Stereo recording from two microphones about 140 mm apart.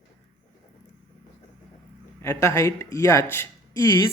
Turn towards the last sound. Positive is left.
turn(degrees=25)  # may be behind; listen again after turning